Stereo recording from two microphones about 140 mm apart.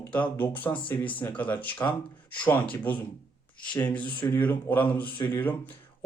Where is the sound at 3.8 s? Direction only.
10° left (ahead or behind).